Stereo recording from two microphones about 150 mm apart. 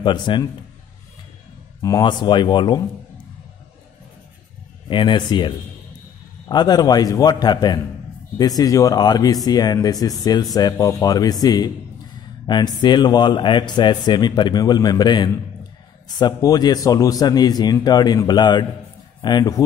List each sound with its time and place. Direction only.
0.0 s speech: 30° left (ahead or behind)
1.8 s speech: 25° left (ahead or behind)
4.8 s speech: 30° left (ahead or behind)
6.5 s speech: 25° left (ahead or behind)